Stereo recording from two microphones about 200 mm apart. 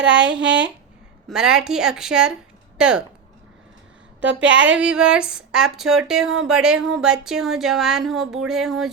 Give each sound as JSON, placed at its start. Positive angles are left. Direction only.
{"t": 0.0, "sound": "speech", "side_deg": -65}
{"t": 1.3, "sound": "speech", "side_deg": -5}
{"t": 4.4, "sound": "speech", "side_deg": -65}
{"t": 4.7, "sound": "speech", "side_deg": -5}